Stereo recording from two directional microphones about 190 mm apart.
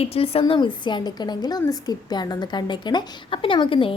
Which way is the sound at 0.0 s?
30° left (ahead or behind).